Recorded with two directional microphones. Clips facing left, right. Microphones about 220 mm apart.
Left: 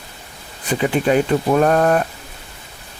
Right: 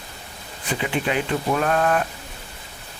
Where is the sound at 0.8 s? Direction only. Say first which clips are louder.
Left 8 dB; 45° left (ahead or behind).